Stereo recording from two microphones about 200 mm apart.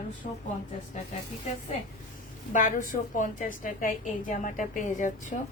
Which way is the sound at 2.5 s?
40° left (ahead or behind).